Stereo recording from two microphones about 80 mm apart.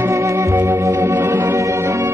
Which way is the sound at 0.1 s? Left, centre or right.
Right.